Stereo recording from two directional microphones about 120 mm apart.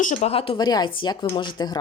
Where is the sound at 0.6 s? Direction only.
35° left (ahead or behind).